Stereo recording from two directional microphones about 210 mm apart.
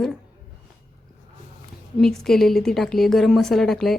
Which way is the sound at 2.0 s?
Centre (ahead or behind).